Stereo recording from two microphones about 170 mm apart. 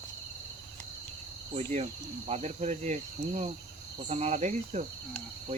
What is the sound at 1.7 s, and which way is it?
Cricket, 40° right (ahead or behind).